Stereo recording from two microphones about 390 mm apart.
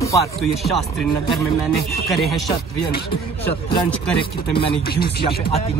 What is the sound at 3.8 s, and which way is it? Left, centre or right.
A man's voice, centre.